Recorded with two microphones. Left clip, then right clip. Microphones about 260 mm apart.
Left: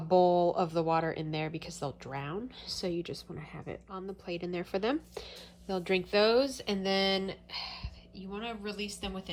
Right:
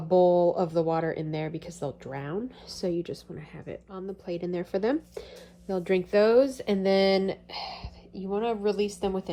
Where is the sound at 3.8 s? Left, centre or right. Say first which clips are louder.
Right 5 dB; centre.